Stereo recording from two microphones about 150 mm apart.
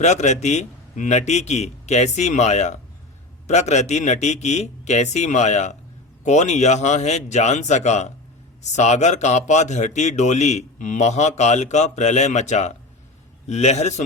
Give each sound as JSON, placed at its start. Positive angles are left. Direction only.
{"t": 0.0, "sound": "a man's voice", "side_deg": 50}